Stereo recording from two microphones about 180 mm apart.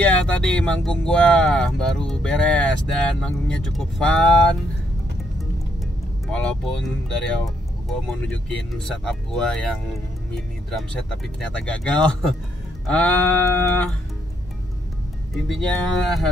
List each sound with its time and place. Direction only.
0.0 s speech: 5° left (ahead or behind)
6.2 s speech: 5° left (ahead or behind)
8.1 s speech: 5° left (ahead or behind)
10.3 s music: centre (ahead or behind)
11.3 s speech: 5° left (ahead or behind)
12.8 s music: 5° left (ahead or behind)
15.3 s speech: centre (ahead or behind)